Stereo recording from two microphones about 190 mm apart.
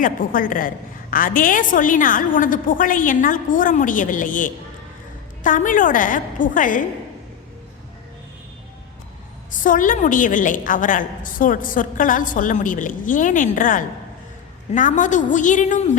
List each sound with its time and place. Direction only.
0.0 s a woman's voice: 45° left (ahead or behind)
9.6 s a woman's voice: 45° left (ahead or behind)